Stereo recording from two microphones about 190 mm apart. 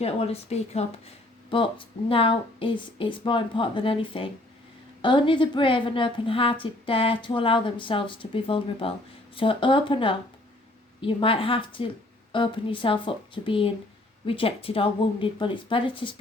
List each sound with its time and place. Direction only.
0.0 s a woman's voice: 30° left (ahead or behind)